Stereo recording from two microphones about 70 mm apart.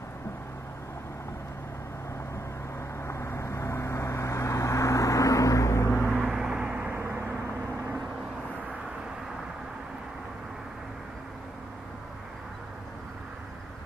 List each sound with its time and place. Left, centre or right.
3.0 s vehicle: left
6.0 s vehicle: centre
7.0 s vehicle: right